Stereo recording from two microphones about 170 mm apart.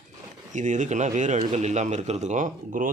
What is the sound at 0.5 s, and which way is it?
Speech, 45° right (ahead or behind).